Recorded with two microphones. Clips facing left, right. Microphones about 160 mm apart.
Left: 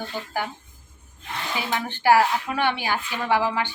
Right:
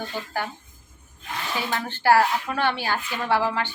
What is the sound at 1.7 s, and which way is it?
A woman's voice, 15° left (ahead or behind).